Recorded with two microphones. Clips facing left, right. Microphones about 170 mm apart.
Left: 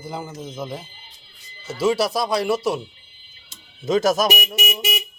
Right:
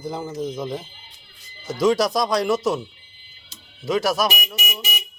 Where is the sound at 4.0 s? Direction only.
45° left (ahead or behind).